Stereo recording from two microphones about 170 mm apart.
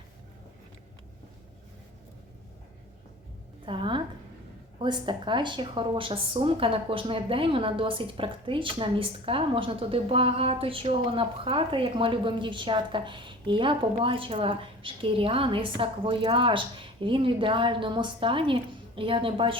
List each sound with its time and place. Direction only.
3.7 s a woman's voice: 30° right (ahead or behind)